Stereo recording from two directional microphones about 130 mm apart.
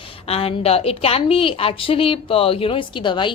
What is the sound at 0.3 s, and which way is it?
A woman's voice, 50° left (ahead or behind).